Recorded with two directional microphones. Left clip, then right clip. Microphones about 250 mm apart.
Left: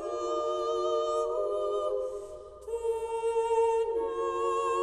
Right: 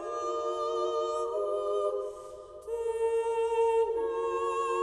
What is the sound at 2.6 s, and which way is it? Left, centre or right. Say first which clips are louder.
Music: right 2 dB; left.